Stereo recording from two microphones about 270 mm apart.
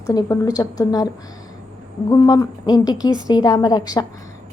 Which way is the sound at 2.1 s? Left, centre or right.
Centre.